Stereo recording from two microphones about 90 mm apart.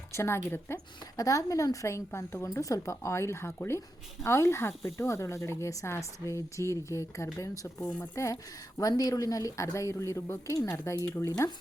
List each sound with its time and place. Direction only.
0.1 s speech: 30° left (ahead or behind)
1.1 s speech: 40° left (ahead or behind); by 10.5 s 25° left (ahead or behind)
10.5 s speech: 35° left (ahead or behind)